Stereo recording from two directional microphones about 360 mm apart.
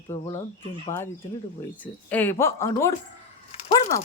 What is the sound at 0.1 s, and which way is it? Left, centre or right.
A woman's voice, centre.